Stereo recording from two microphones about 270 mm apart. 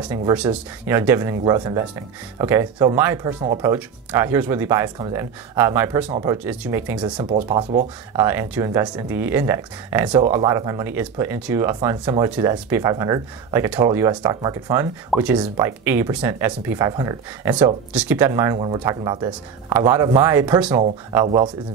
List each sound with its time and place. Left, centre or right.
0.0 s speech: centre
6.0 s speech: right
6.3 s speech: centre
7.2 s speech: right